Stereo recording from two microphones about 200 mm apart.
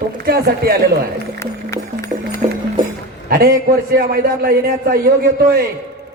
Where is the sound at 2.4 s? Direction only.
35° right (ahead or behind).